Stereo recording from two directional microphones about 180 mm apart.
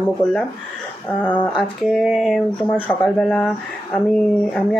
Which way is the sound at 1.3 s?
25° left (ahead or behind).